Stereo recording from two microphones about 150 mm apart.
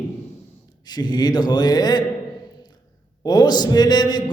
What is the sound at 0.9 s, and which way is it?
Speech, 25° left (ahead or behind).